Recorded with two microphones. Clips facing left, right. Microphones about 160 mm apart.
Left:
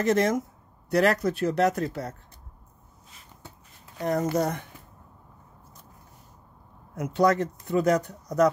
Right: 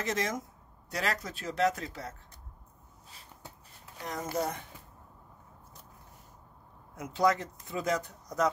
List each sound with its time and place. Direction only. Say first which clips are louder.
0.0 s speech: left 10 dB; 60° left (ahead or behind)
4.0 s speech: left 9 dB; 65° left (ahead or behind)
7.1 s speech: left 5 dB; 65° left (ahead or behind)